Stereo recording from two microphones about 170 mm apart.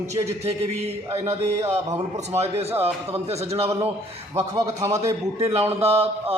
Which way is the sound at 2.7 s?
10° right (ahead or behind).